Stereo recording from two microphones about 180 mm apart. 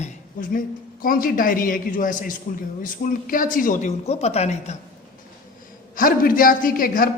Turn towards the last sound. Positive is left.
turn(degrees=50)  # may be behind; listen again after turning